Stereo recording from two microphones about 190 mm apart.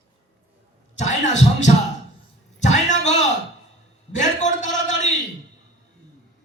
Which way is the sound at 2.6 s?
35° left (ahead or behind).